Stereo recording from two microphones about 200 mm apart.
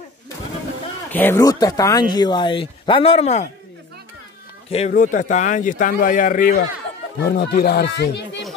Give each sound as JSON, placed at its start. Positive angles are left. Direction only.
{"t": 1.1, "sound": "speech", "side_deg": 10}
{"t": 4.6, "sound": "speech", "side_deg": 35}